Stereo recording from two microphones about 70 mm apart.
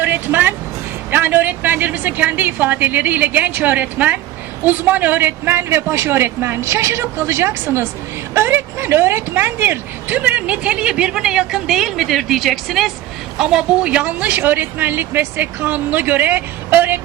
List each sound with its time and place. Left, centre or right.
0.0 s speech: right
10.2 s a woman's voice: right